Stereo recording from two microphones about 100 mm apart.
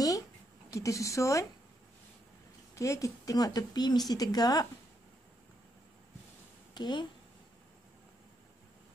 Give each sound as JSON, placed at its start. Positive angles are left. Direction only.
{"t": 0.7, "sound": "speech", "side_deg": 30}
{"t": 2.7, "sound": "speech", "side_deg": 30}
{"t": 6.7, "sound": "speech", "side_deg": 50}